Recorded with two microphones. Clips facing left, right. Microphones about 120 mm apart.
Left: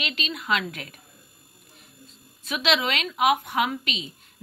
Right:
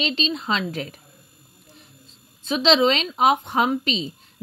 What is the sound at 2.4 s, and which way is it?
A woman's voice, 30° right (ahead or behind).